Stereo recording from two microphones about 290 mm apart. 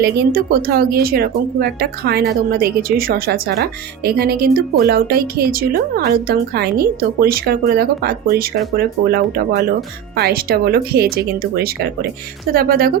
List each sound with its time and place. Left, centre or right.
0.0 s speech: right